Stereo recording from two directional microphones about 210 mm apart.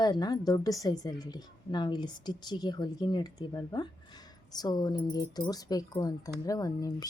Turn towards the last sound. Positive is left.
turn(degrees=15)  # may be behind; listen again after turning